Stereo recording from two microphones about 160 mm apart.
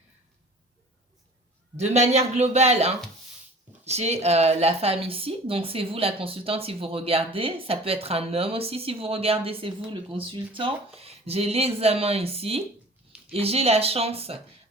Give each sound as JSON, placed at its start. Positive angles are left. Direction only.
{"t": 1.7, "sound": "a man's voice", "side_deg": -45}